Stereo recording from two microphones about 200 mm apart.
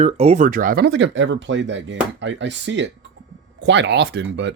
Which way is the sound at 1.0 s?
65° right (ahead or behind).